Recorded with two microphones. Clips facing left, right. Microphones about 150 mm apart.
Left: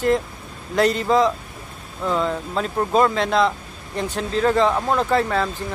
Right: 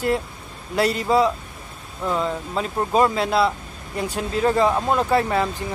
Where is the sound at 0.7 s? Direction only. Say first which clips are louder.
Left 1 dB; 10° right (ahead or behind).